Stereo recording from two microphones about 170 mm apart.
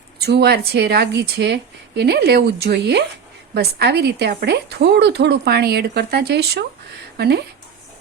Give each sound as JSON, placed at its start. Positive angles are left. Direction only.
{"t": 0.2, "sound": "a woman's voice", "side_deg": -70}